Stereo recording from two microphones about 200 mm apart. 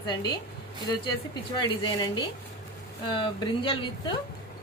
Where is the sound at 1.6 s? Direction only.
20° left (ahead or behind).